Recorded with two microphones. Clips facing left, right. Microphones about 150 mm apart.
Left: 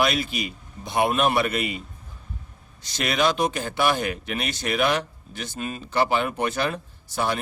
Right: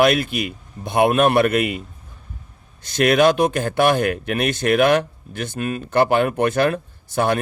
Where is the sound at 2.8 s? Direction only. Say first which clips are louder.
Right 8 dB; 55° right (ahead or behind).